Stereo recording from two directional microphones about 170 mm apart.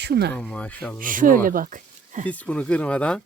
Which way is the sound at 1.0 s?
55° right (ahead or behind).